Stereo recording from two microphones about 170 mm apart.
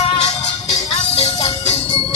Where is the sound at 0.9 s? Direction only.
35° left (ahead or behind).